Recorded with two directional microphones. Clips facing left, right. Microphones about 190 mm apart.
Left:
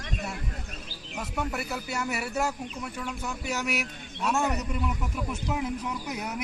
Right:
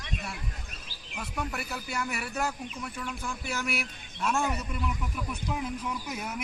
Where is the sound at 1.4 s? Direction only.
25° left (ahead or behind).